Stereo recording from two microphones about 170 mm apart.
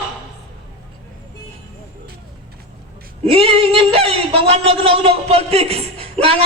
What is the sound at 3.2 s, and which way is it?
A woman's voice, 35° right (ahead or behind).